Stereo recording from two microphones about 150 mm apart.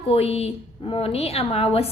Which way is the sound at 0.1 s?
40° left (ahead or behind).